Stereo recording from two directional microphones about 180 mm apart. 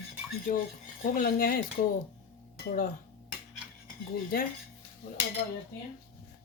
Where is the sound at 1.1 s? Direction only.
50° left (ahead or behind).